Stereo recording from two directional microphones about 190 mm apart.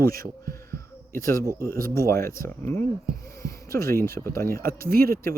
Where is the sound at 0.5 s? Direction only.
15° left (ahead or behind).